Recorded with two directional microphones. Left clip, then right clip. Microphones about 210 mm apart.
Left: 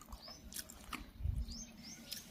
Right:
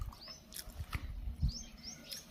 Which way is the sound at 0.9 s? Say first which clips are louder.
Even; 15° left (ahead or behind).